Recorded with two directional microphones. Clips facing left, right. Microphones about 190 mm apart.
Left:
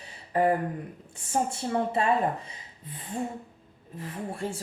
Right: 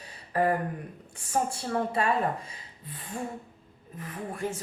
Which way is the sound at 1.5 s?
25° left (ahead or behind).